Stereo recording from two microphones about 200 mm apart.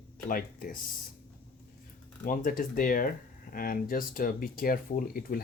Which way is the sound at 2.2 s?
45° left (ahead or behind).